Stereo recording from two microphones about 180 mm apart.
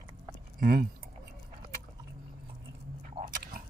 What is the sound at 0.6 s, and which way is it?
Speech, 55° right (ahead or behind).